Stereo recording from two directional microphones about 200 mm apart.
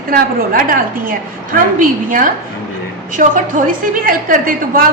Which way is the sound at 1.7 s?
40° right (ahead or behind).